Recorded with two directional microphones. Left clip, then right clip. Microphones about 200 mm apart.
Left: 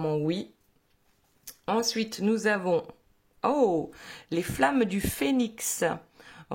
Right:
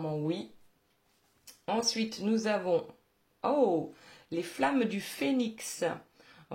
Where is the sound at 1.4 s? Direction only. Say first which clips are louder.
Left 4 dB; 35° left (ahead or behind).